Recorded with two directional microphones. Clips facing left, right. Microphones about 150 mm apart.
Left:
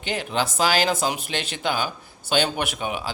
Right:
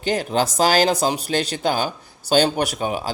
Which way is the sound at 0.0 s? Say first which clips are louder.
Right 5 dB; 40° right (ahead or behind).